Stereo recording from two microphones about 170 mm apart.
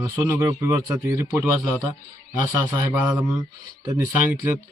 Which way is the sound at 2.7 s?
10° right (ahead or behind).